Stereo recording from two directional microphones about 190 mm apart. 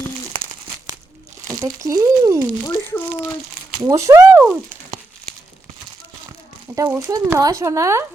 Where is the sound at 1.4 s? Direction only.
15° right (ahead or behind).